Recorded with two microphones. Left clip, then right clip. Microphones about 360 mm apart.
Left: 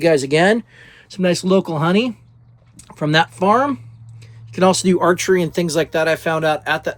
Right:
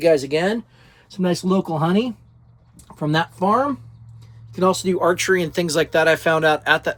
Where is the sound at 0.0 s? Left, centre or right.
Left.